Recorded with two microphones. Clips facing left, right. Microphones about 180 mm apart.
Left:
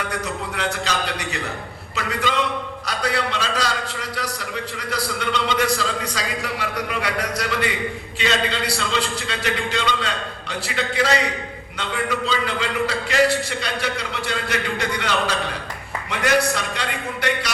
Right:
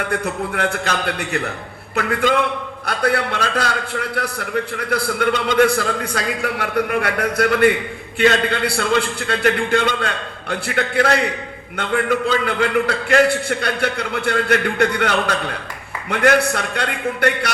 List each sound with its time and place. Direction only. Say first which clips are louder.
0.1 s a man's voice: right 5 dB; 55° right (ahead or behind)